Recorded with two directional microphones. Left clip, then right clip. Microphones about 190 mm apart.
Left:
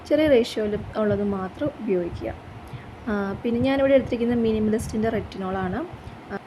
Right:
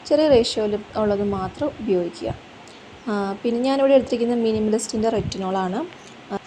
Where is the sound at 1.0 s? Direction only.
20° left (ahead or behind).